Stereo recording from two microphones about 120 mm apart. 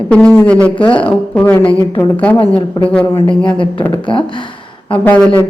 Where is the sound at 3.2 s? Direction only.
45° left (ahead or behind).